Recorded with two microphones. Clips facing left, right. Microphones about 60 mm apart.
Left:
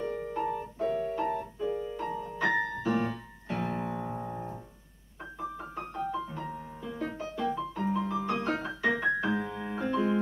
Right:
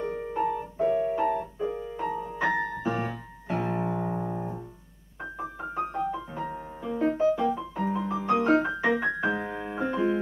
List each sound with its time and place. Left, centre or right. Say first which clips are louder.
0.0 s piano: right 2 dB; right
0.3 s keyboard: right 4 dB; right
1.6 s piano: right 2 dB; right
2.3 s music: even; centre
3.0 s keyboard: even; centre
5.2 s piano: right 3 dB; centre
7.2 s music: right 7 dB; centre